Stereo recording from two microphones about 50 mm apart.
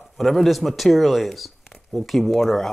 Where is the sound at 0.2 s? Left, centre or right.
Centre.